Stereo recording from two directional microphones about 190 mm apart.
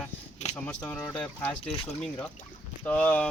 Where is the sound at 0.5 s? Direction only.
5° left (ahead or behind).